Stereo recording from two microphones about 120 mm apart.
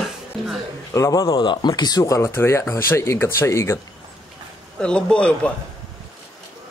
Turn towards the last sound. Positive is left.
turn(degrees=10)  # may be behind; listen again after turning